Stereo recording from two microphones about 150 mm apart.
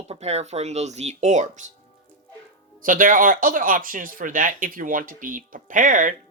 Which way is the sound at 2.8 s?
65° right (ahead or behind).